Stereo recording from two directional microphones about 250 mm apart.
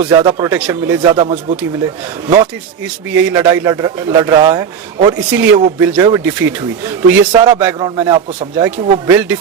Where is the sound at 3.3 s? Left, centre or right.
Centre.